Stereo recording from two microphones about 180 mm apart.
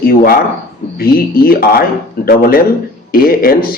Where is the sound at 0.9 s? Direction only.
55° left (ahead or behind).